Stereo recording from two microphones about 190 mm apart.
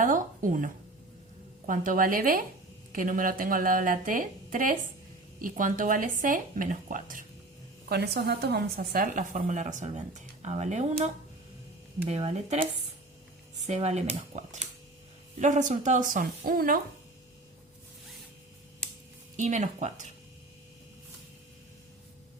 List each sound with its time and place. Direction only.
0.0 s a sound: 45° right (ahead or behind)
1.6 s speech: 45° right (ahead or behind)
7.9 s a woman's voice: 60° right (ahead or behind)
19.4 s a woman's voice: 40° right (ahead or behind)